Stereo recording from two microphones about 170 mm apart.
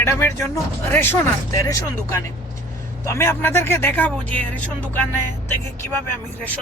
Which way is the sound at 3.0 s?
15° left (ahead or behind).